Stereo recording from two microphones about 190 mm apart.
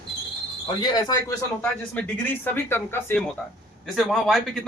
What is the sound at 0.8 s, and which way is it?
Speech, 20° left (ahead or behind).